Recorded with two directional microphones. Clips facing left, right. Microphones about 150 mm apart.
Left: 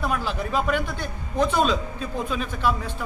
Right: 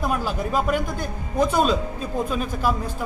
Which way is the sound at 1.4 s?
5° right (ahead or behind).